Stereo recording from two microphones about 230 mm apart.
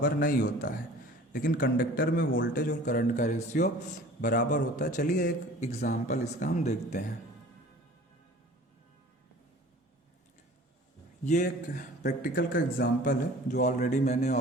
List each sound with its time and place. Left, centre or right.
0.0 s a man's voice: left
2.6 s a man's voice: left
11.3 s a man's voice: left